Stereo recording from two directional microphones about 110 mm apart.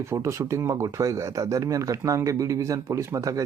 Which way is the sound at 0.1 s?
25° right (ahead or behind).